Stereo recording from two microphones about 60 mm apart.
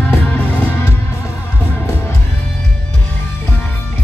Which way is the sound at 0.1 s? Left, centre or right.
Left.